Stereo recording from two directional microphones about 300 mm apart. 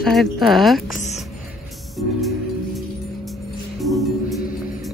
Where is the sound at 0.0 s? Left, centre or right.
Centre.